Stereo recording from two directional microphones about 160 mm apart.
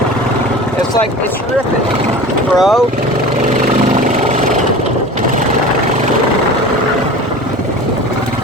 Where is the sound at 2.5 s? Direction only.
Centre (ahead or behind).